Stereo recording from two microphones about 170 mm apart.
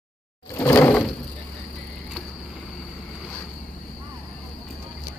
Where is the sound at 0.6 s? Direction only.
15° left (ahead or behind).